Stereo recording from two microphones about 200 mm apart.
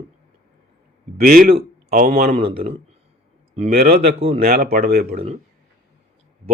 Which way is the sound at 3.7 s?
50° right (ahead or behind).